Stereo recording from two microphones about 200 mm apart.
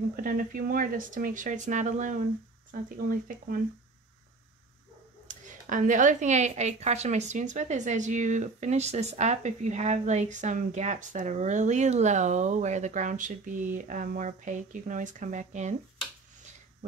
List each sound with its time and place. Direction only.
0.1 s speech: 45° right (ahead or behind)
5.3 s a woman's voice: 40° right (ahead or behind)